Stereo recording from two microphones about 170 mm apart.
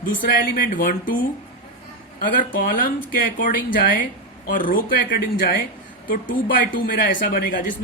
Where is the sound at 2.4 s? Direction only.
55° left (ahead or behind).